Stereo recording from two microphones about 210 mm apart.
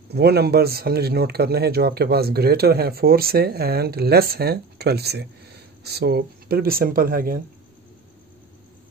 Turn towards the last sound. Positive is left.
turn(degrees=-45)  # may be behind; listen again after turning